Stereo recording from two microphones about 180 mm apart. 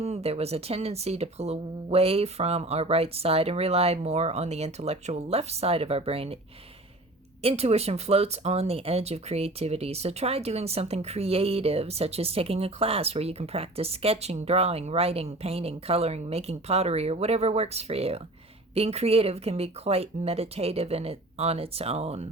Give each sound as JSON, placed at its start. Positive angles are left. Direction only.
{"t": 0.0, "sound": "speech", "side_deg": -35}
{"t": 7.4, "sound": "speech", "side_deg": -35}